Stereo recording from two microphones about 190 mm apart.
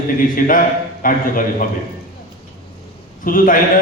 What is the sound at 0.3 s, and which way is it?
Speech, 45° left (ahead or behind).